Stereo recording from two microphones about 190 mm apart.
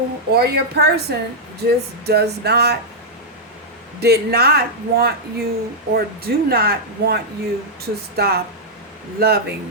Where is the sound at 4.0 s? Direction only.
55° right (ahead or behind).